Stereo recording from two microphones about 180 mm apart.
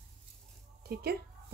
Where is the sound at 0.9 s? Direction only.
60° right (ahead or behind).